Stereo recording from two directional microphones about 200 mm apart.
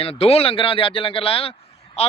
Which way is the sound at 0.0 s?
30° left (ahead or behind).